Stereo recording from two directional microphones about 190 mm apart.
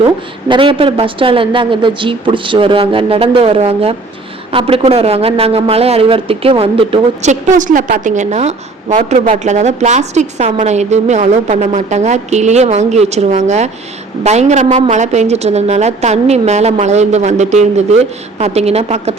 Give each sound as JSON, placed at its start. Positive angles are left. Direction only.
{"t": 0.0, "sound": "a woman's voice", "side_deg": -25}